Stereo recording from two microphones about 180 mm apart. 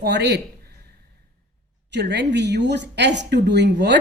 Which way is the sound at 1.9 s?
70° right (ahead or behind).